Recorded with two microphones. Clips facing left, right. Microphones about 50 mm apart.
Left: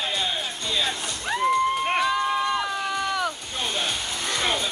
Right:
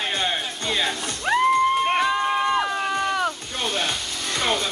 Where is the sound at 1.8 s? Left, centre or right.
Centre.